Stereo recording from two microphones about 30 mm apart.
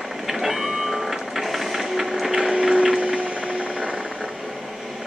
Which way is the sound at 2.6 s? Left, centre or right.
Right.